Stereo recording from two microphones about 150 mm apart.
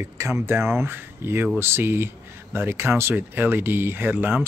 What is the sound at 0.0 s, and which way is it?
Speech, 20° right (ahead or behind).